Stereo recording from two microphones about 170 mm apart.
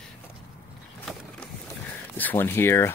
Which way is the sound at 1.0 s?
Centre (ahead or behind).